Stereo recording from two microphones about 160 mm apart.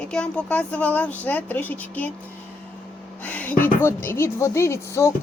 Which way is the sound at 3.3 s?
10° left (ahead or behind).